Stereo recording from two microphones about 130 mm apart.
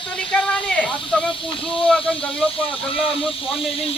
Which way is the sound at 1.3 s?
40° left (ahead or behind).